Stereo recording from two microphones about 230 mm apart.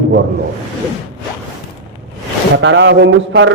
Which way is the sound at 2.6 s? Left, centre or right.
Right.